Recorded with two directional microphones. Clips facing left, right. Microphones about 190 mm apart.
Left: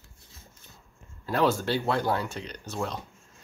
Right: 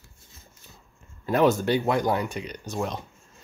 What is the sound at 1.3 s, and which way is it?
Speech, 20° right (ahead or behind).